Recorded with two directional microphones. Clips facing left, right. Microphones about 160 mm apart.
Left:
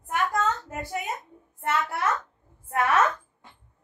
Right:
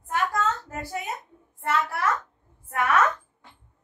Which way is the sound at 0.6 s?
20° left (ahead or behind).